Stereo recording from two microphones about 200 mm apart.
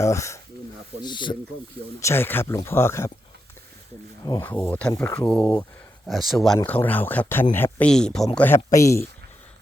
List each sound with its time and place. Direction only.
0.0 s speech: 15° left (ahead or behind)
4.2 s speech: 15° left (ahead or behind)